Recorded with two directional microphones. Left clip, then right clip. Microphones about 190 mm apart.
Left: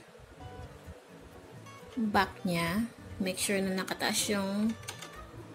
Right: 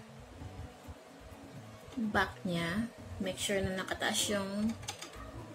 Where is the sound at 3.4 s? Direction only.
50° left (ahead or behind).